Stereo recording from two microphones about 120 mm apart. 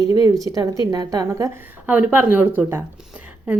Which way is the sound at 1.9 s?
15° right (ahead or behind).